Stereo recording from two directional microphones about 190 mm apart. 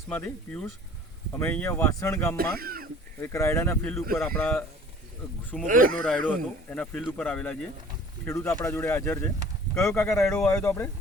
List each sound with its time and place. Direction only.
0.1 s speech: 10° left (ahead or behind)
2.3 s speech: 50° right (ahead or behind)
3.2 s speech: 15° left (ahead or behind)
5.6 s speech: 45° right (ahead or behind)
6.0 s speech: 5° left (ahead or behind)